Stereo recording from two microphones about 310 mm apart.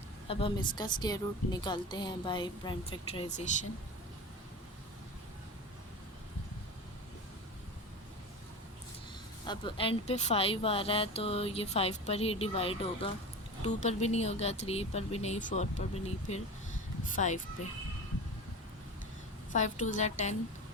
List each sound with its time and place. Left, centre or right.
0.3 s speech: centre
9.5 s speech: centre
19.5 s speech: left